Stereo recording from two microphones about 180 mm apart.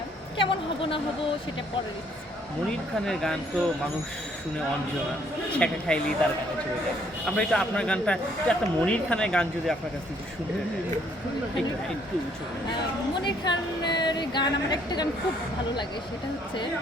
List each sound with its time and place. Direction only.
0.3 s a sound: 30° left (ahead or behind)
3.1 s a man's voice: centre (ahead or behind)
5.5 s speech: 5° left (ahead or behind)
7.3 s a man's voice: 5° left (ahead or behind)
13.2 s a woman's voice: 25° left (ahead or behind)